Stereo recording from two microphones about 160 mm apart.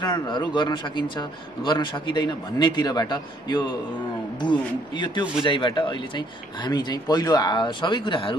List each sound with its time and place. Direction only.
0.0 s a man's voice: 25° left (ahead or behind)